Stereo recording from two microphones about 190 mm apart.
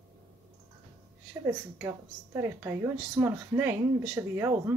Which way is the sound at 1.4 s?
15° right (ahead or behind).